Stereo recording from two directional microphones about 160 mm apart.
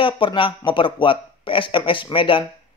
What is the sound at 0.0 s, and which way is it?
A man's voice, 35° left (ahead or behind).